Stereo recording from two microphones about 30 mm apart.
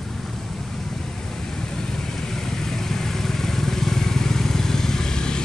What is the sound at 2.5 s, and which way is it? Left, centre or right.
Vehicle, centre.